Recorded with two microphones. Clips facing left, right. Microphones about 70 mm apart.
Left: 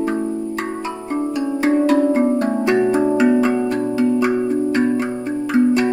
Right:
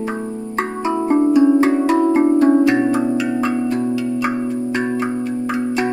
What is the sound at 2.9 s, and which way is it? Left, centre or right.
Music, left.